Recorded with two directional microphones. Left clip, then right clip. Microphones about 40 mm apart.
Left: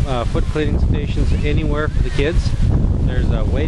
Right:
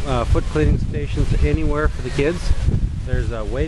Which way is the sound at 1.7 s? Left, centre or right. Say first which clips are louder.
Even; right.